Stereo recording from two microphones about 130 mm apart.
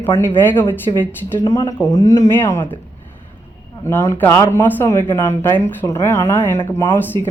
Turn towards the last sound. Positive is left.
turn(degrees=15)  # may be behind; listen again after turning